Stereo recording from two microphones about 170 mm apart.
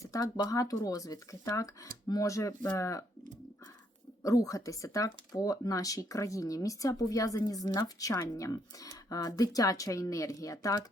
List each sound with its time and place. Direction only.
0.0 s speech: 20° left (ahead or behind)
4.2 s speech: 20° left (ahead or behind)